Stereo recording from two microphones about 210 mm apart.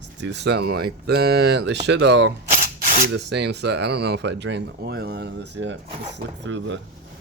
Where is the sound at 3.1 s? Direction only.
55° right (ahead or behind).